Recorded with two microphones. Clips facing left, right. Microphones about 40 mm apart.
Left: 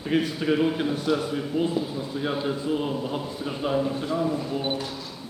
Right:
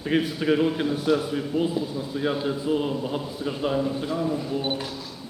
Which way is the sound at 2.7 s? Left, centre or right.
Centre.